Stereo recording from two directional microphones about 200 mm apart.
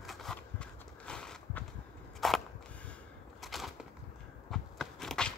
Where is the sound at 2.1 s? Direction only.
Centre (ahead or behind).